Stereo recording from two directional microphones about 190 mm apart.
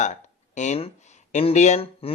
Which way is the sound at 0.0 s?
40° left (ahead or behind).